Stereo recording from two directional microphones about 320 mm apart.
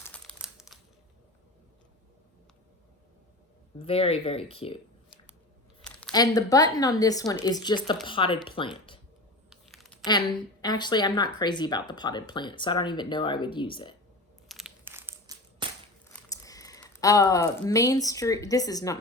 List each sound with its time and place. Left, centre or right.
0.0 s crumpling: centre
3.8 s speech: centre
9.5 s computer keyboard: centre
10.1 s speech: centre
14.4 s crushing: centre
16.0 s speech: centre